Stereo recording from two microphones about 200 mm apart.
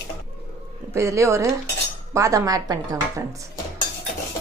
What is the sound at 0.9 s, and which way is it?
Dishes, 15° right (ahead or behind).